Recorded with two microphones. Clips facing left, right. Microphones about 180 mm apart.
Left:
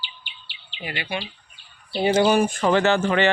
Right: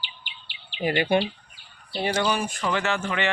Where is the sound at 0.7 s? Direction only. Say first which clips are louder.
Right 8 dB; 45° right (ahead or behind).